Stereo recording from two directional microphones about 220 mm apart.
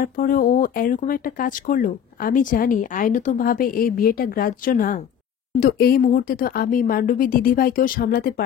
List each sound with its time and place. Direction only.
0.0 s speech: 40° left (ahead or behind)